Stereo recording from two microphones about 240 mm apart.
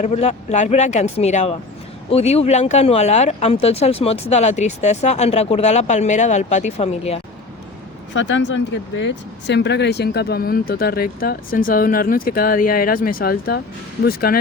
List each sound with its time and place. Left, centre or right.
0.0 s speech: left
8.1 s speech: left